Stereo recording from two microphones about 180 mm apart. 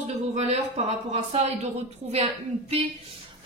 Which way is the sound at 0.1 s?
35° right (ahead or behind).